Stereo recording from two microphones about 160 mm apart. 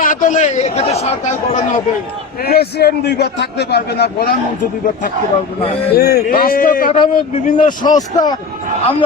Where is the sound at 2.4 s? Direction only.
80° left.